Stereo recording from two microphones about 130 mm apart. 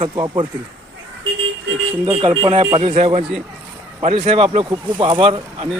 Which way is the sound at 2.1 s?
45° right (ahead or behind).